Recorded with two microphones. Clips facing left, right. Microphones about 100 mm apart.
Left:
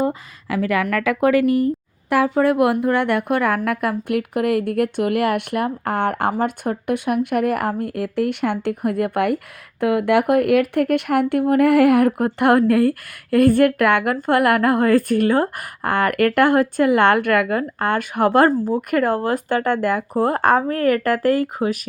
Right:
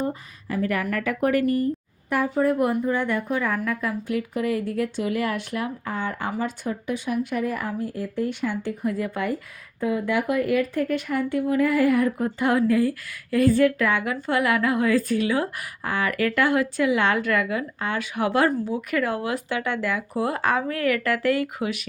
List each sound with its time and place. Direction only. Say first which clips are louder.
0.0 s speech: left 6 dB; 90° left; by 21.8 s 40° left (ahead or behind)